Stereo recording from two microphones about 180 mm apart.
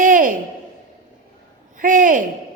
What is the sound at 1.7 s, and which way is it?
Speech, 45° right (ahead or behind).